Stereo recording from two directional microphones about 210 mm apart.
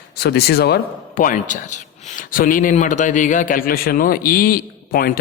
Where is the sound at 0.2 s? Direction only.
50° left (ahead or behind).